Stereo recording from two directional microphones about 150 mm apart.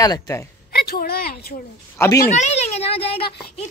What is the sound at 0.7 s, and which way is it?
Speech, 90° left.